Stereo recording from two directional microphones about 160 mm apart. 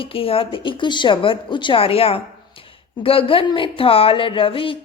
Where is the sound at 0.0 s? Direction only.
35° left (ahead or behind).